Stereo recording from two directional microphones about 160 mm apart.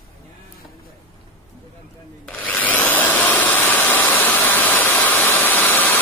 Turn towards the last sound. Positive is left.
turn(degrees=10)  # may be behind; listen again after turning